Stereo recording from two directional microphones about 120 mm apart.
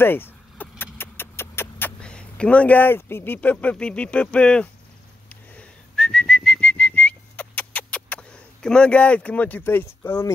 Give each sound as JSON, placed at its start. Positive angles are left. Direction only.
{"t": 0.0, "sound": "keys jangling", "side_deg": 20}
{"t": 0.9, "sound": "a sound", "side_deg": 20}
{"t": 5.3, "sound": "whistling", "side_deg": 10}